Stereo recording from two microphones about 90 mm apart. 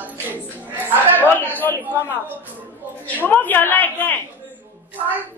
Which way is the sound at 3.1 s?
20° left (ahead or behind).